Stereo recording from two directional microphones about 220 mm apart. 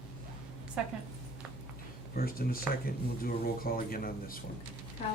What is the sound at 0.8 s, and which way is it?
Speech, 5° right (ahead or behind).